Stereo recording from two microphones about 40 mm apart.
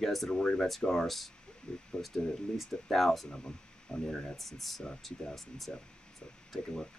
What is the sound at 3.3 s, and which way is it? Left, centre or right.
Speech, left.